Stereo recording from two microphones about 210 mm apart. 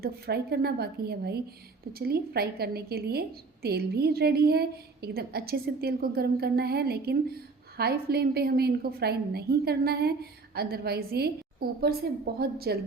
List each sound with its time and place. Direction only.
0.0 s a woman's voice: 50° right (ahead or behind)
12.4 s a woman's voice: 45° right (ahead or behind)